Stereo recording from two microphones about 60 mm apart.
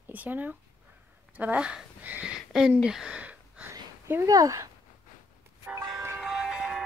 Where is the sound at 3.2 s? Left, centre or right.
Right.